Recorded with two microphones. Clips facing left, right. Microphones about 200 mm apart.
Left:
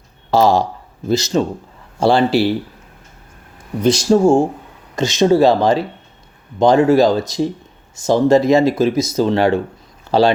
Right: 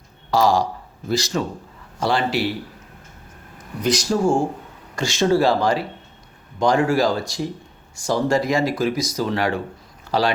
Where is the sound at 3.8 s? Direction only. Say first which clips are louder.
Left 7 dB; 25° left (ahead or behind).